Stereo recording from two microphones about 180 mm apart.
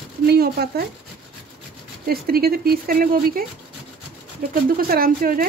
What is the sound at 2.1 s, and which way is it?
A woman's voice, 60° right (ahead or behind).